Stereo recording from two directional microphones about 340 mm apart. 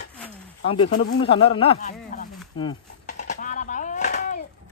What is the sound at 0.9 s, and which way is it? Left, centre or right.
Speech, left.